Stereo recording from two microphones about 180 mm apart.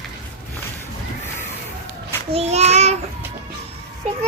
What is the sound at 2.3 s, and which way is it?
Child singing, 35° right (ahead or behind).